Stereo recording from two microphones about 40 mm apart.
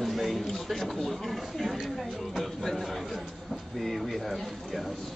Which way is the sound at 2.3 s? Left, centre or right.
Centre.